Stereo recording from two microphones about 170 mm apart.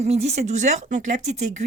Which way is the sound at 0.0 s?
40° right (ahead or behind).